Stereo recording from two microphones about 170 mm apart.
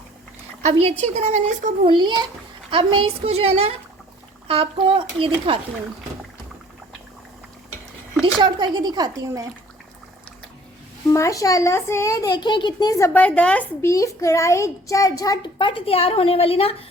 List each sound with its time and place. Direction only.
0.6 s speech: 35° right (ahead or behind)
1.9 s speech: 30° right (ahead or behind)
8.2 s speech: 30° right (ahead or behind)
11.1 s a child's voice: 20° left (ahead or behind)
13.1 s a child's voice: 10° left (ahead or behind); by 16.7 s 35° left (ahead or behind)